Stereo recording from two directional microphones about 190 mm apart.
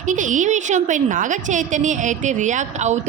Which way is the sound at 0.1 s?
40° right (ahead or behind).